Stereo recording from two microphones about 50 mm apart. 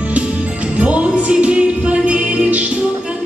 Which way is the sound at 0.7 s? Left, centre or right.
Right.